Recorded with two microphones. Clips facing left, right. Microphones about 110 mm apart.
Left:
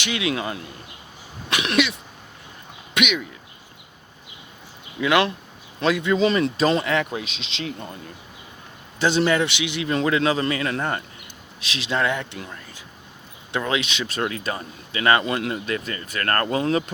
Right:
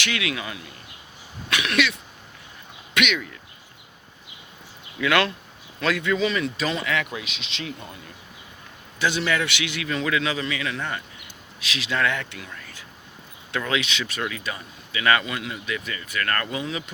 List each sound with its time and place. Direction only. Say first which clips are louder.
0.0 s speech: left 3 dB; 25° left (ahead or behind)
1.5 s a sound: left 2 dB; 20° left (ahead or behind)
2.9 s speech: left 1 dB; 15° left (ahead or behind)
4.9 s speech: left 2 dB; 20° left (ahead or behind)
6.2 s speech: left 6 dB; 35° left (ahead or behind)
9.8 s speech: left 5 dB; 35° left (ahead or behind)
11.6 s speech: left 1 dB; 25° left (ahead or behind)
12.4 s speech: left 3 dB; 35° left (ahead or behind)
13.5 s speech: left 2 dB; 25° left (ahead or behind); by 16.8 s 45° left (ahead or behind)